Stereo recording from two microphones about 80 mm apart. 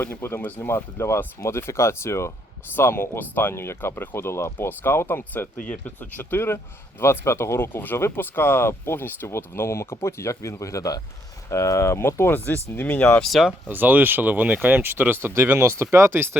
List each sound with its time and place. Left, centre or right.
0.0 s speech: left
0.9 s speech: left; by 13.3 s centre
13.7 s speech: right